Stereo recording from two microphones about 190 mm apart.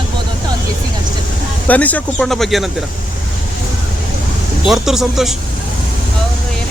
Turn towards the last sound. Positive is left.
turn(degrees=0)  # may be behind; listen again after turning